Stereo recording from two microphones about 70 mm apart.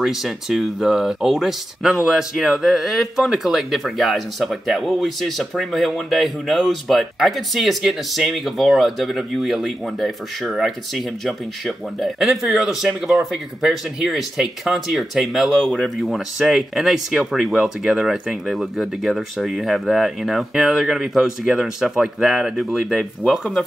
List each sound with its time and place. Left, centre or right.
0.0 s speech: centre